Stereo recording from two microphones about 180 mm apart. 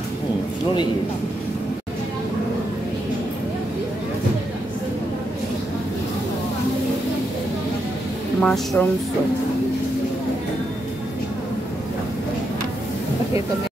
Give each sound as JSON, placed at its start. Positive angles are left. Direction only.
{"t": 8.4, "sound": "speech", "side_deg": 5}